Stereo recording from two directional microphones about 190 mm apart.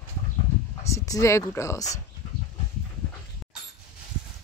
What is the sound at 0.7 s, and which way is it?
Speech, 15° left (ahead or behind).